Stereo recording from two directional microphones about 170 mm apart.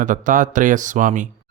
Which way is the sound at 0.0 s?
50° right (ahead or behind).